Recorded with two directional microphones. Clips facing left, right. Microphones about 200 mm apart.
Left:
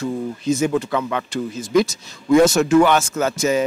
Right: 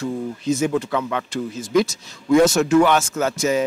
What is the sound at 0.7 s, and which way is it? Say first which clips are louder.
A man's voice: left 1 dB; 20° left (ahead or behind).